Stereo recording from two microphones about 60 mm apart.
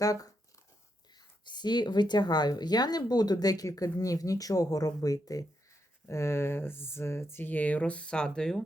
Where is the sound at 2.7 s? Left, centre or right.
Left.